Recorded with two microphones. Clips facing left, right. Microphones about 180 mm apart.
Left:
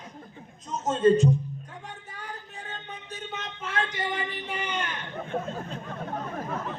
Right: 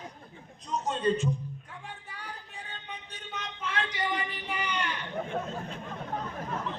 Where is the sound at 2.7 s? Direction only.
50° left (ahead or behind).